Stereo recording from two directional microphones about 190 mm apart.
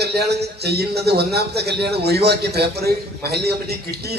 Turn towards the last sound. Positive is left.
turn(degrees=-55)  # may be behind; listen again after turning